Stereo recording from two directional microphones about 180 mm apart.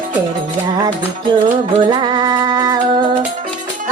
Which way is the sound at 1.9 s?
25° right (ahead or behind).